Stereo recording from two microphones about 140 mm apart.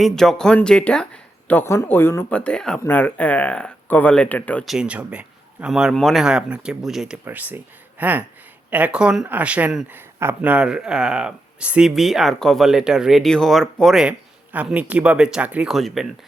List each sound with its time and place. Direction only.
0.0 s speech: 5° left (ahead or behind)
4.6 s speech: 5° right (ahead or behind)
7.3 s speech: 15° right (ahead or behind)